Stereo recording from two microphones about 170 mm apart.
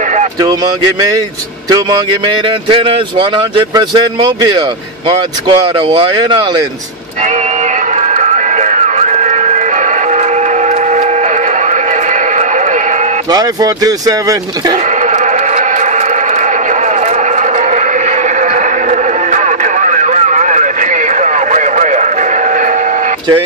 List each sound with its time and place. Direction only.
2.7 s a man's voice: 30° right (ahead or behind)
8.2 s radio: 45° right (ahead or behind)
13.3 s a man's voice: 25° right (ahead or behind)
18.9 s radio: 45° right (ahead or behind)